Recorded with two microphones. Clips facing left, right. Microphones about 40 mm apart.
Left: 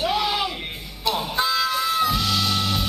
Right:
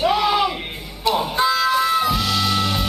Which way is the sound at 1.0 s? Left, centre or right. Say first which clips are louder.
Right 5 dB; centre.